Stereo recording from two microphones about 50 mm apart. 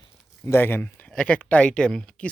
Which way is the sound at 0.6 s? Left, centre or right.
Left.